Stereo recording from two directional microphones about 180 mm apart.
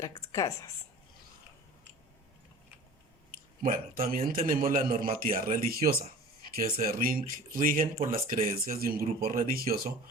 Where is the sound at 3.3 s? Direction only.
50° right (ahead or behind).